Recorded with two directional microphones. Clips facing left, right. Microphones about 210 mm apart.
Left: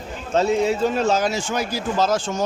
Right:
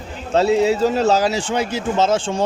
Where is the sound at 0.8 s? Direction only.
35° right (ahead or behind).